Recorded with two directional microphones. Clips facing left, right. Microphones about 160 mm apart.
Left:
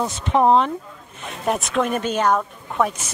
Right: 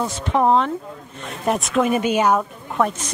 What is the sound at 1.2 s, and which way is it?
Speech, centre (ahead or behind).